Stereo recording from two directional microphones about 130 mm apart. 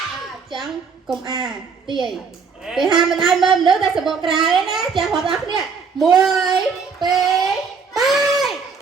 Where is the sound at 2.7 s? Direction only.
Centre (ahead or behind).